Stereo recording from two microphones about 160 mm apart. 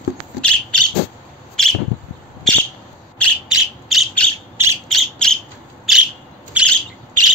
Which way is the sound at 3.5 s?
Centre (ahead or behind).